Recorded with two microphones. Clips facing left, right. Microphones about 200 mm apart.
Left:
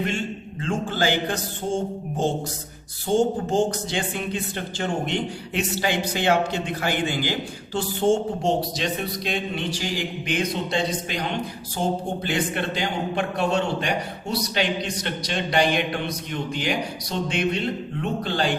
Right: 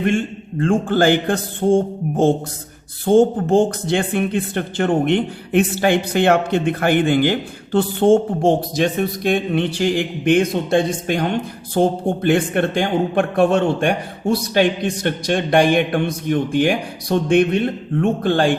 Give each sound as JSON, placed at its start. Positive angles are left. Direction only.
{"t": 0.0, "sound": "speech", "side_deg": -50}